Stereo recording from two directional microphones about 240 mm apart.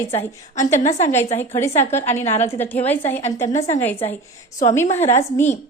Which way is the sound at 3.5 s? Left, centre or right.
Left.